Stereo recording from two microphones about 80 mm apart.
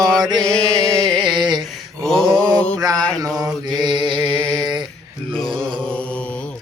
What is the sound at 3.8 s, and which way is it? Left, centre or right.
Mantra, right.